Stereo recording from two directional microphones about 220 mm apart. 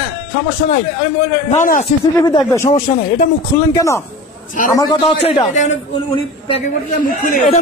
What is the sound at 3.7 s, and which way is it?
A man's voice, 15° left (ahead or behind).